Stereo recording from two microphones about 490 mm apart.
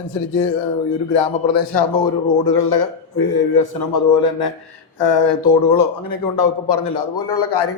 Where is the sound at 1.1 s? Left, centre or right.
Left.